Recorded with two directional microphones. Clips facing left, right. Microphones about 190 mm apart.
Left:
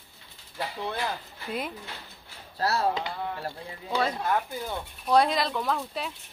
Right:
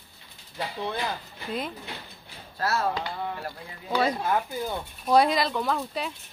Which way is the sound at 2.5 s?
35° left (ahead or behind).